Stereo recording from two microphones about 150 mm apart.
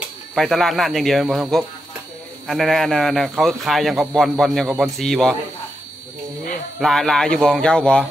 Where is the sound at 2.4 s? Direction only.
Centre (ahead or behind).